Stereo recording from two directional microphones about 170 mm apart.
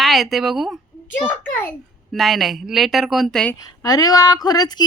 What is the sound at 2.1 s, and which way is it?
Speech, centre (ahead or behind).